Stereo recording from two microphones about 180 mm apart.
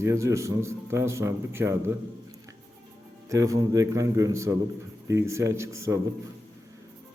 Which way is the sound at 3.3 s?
20° right (ahead or behind).